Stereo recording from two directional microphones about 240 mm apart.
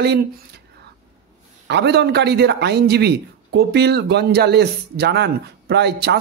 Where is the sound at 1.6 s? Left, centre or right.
Right.